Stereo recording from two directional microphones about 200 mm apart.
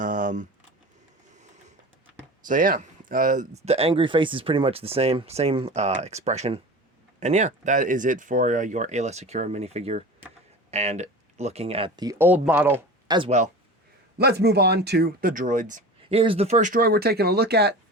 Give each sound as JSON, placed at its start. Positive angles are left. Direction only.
{"t": 0.0, "sound": "a sound", "side_deg": -40}
{"t": 2.5, "sound": "speech", "side_deg": -40}
{"t": 13.1, "sound": "speech", "side_deg": -25}
{"t": 14.2, "sound": "speech", "side_deg": -55}